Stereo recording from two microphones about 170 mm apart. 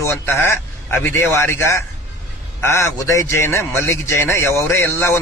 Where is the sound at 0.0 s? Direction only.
15° left (ahead or behind).